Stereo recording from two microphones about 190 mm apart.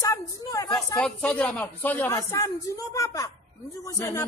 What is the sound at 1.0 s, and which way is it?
Speech, 5° left (ahead or behind).